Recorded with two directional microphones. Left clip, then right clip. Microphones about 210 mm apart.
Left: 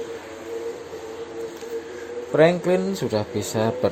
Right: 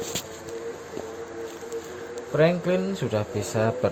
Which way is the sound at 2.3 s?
40° left (ahead or behind).